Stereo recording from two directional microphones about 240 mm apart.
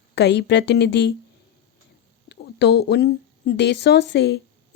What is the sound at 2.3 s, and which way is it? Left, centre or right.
Speech, left.